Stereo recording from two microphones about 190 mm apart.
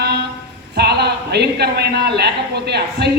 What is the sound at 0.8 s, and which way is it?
A man's voice, 60° right (ahead or behind).